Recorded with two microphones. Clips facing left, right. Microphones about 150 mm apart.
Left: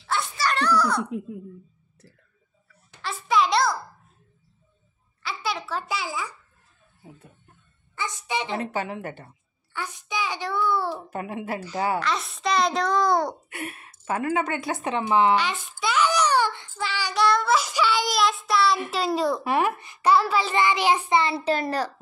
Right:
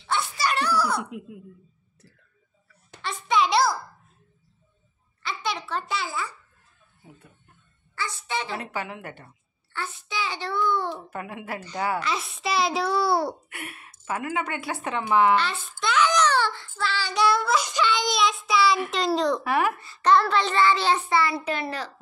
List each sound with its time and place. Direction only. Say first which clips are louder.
0.4 s a child's voice: left 3 dB; 10° right (ahead or behind)
3.0 s a sound: left 1 dB; 5° left (ahead or behind)
5.2 s a sound: even; 5° left (ahead or behind)
7.9 s speech: left 1 dB; 20° left (ahead or behind)
8.8 s a child's voice: left 4 dB; 30° left (ahead or behind)
9.7 s a child's voice: left 1 dB; 15° left (ahead or behind)
11.1 s speech: left 4 dB; 25° left (ahead or behind)
12.0 s a child's voice: left 2 dB; centre (ahead or behind)
13.5 s speech: left 5 dB; 30° left (ahead or behind)
15.3 s child singing: even; 10° left (ahead or behind)
17.1 s child singing: left 1 dB; centre (ahead or behind)
18.9 s a child's voice: even; 5° left (ahead or behind)
19.4 s a child's voice: left 1 dB; 20° left (ahead or behind)
21.5 s a child's voice: left 5 dB; 40° left (ahead or behind)